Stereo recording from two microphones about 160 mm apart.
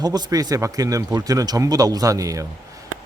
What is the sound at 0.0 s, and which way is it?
Speech, 25° right (ahead or behind).